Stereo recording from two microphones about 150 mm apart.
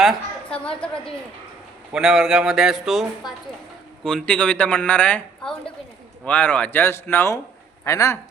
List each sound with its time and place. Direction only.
0.0 s a woman's voice: 5° left (ahead or behind); by 8.2 s 20° left (ahead or behind)